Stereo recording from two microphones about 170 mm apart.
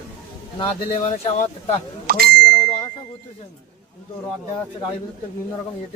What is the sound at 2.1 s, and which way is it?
Speech, 65° right (ahead or behind).